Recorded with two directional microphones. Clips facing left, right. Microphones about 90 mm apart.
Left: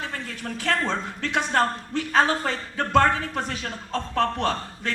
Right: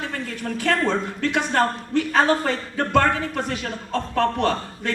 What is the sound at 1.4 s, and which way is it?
A man's voice, 45° right (ahead or behind).